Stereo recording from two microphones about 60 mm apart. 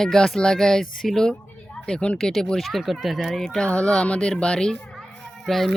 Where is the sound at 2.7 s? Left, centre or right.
Centre.